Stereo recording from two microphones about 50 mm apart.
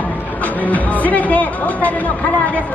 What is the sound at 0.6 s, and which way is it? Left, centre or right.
Music, left.